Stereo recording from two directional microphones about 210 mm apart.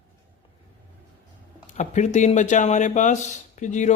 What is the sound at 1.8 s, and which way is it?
Speech, 35° left (ahead or behind).